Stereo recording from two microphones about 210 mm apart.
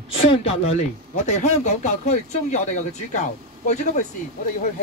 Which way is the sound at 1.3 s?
35° left (ahead or behind).